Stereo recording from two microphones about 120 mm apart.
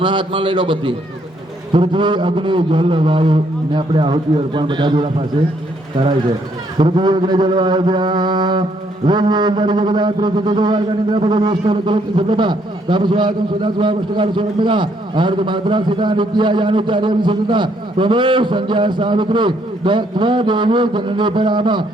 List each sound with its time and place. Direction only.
0.0 s a man's voice: 40° right (ahead or behind)
6.7 s a man's voice: 40° right (ahead or behind)